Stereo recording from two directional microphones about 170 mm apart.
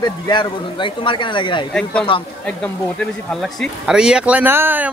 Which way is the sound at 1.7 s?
5° left (ahead or behind).